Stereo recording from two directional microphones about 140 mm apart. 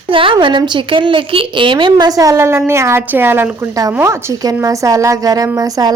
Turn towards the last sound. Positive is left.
turn(degrees=-25)  # may be behind; listen again after turning